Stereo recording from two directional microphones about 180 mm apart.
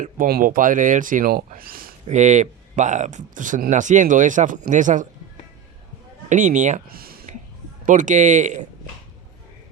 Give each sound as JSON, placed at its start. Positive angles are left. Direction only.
{"t": 0.0, "sound": "speech", "side_deg": -55}
{"t": 2.0, "sound": "speech", "side_deg": -40}
{"t": 6.2, "sound": "speech", "side_deg": -45}
{"t": 7.9, "sound": "speech", "side_deg": -45}